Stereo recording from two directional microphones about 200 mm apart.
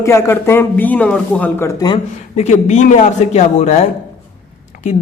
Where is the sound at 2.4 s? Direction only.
35° left (ahead or behind).